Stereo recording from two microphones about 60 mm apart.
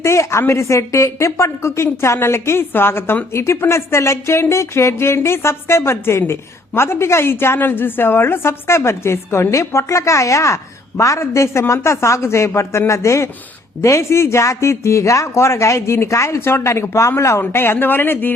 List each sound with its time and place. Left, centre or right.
0.0 s music: left
2.1 s a woman's voice: left
3.3 s music: left
12.9 s speech: left
13.8 s music: left
17.5 s a woman's voice: left